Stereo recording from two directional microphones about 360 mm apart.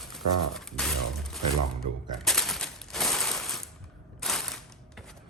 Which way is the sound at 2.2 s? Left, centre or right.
Centre.